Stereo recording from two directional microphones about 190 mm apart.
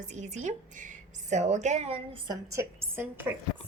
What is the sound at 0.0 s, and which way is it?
A woman's voice, 40° right (ahead or behind).